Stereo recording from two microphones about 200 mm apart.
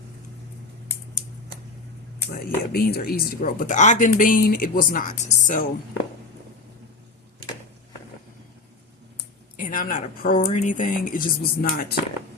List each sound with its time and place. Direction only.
2.3 s speech: 50° left (ahead or behind)
9.6 s speech: 40° left (ahead or behind)